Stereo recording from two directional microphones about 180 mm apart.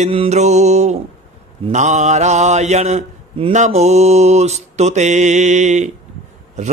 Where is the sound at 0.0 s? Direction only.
35° right (ahead or behind).